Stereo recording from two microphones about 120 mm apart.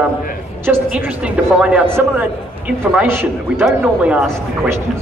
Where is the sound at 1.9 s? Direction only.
20° right (ahead or behind).